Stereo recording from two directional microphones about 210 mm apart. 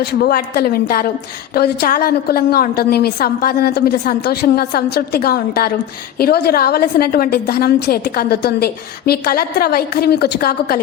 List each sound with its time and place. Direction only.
0.0 s a woman's voice: 45° left (ahead or behind)